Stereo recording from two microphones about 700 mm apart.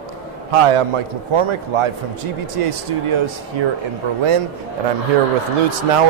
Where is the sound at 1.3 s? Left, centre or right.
Right.